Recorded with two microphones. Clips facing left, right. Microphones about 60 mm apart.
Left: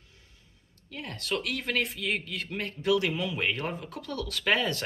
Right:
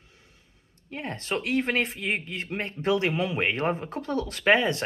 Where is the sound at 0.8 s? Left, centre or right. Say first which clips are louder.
Right 3 dB; right.